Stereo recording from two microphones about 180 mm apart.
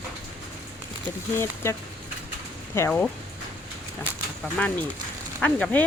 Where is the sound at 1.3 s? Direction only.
15° left (ahead or behind).